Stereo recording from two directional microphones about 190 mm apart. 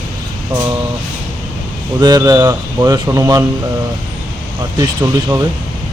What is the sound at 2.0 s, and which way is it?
Speech, 20° right (ahead or behind).